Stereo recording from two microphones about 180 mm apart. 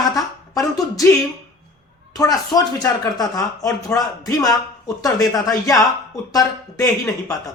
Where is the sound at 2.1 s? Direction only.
20° left (ahead or behind).